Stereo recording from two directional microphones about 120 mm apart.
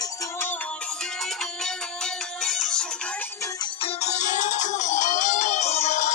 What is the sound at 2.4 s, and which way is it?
Music, 5° left (ahead or behind).